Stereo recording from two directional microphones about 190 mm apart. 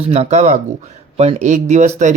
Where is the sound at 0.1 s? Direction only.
35° right (ahead or behind).